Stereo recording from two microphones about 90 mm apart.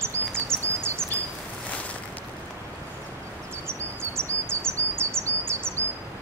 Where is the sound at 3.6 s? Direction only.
30° right (ahead or behind).